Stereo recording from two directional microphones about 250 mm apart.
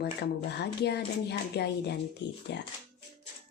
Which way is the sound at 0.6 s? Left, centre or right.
Left.